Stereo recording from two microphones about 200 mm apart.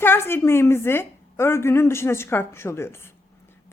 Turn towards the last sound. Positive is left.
turn(degrees=10)  # may be behind; listen again after turning